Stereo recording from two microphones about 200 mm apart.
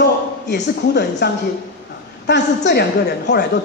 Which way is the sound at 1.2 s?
60° left (ahead or behind).